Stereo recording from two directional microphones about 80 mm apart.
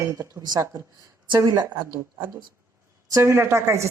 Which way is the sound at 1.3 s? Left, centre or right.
Right.